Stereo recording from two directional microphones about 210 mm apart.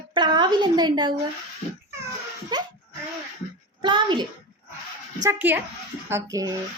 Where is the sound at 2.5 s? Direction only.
20° right (ahead or behind).